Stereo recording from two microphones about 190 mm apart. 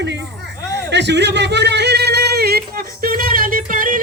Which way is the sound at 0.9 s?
65° right (ahead or behind).